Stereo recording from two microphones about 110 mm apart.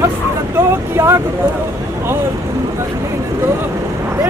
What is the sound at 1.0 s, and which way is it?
Speech, 25° right (ahead or behind).